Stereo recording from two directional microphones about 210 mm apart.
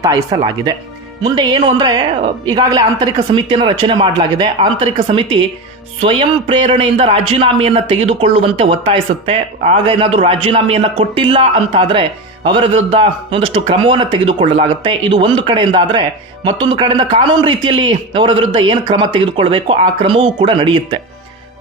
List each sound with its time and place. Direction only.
0.0 s a man's voice: 20° right (ahead or behind)